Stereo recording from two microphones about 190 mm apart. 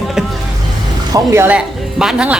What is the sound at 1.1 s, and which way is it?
Speech, 10° right (ahead or behind).